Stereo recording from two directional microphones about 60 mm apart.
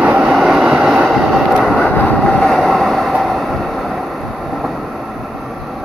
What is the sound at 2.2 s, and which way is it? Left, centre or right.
Vehicle, centre.